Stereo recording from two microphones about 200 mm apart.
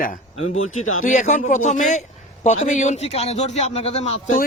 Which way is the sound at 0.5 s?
35° left (ahead or behind).